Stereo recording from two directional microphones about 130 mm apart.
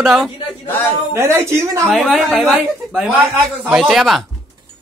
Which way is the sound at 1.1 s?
20° right (ahead or behind).